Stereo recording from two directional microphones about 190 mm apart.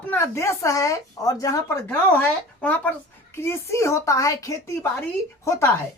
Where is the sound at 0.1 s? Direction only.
15° left (ahead or behind).